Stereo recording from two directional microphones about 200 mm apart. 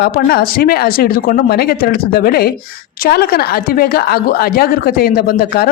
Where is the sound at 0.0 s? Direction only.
50° left (ahead or behind).